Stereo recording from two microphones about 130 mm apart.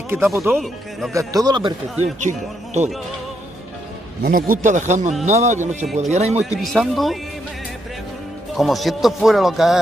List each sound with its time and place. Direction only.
0.1 s a man's voice: 20° right (ahead or behind)
2.2 s speech: 60° right (ahead or behind)
4.3 s speech: 90° right; by 5.1 s 70° right (ahead or behind)
5.2 s speech: 60° right (ahead or behind)
6.4 s speech: centre (ahead or behind)
8.5 s speech: centre (ahead or behind)